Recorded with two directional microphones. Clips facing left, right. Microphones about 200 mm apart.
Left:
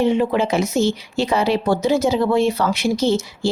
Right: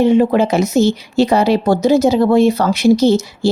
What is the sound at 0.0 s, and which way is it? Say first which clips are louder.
Speech: right 6 dB; 45° right (ahead or behind).